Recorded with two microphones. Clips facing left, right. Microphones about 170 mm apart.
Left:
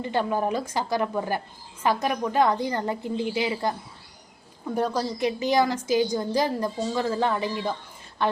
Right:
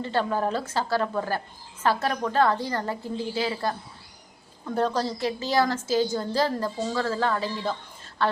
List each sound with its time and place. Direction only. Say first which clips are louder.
0.0 s a woman's voice: even; 15° left (ahead or behind)